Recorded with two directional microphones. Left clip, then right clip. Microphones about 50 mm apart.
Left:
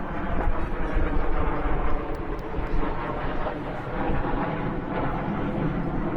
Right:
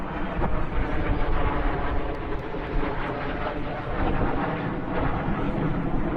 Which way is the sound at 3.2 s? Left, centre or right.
Right.